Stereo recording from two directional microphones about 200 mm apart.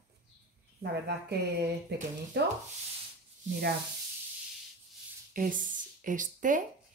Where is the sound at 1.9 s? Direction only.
55° right (ahead or behind).